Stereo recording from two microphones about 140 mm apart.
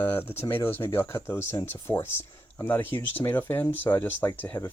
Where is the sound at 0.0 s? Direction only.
15° left (ahead or behind).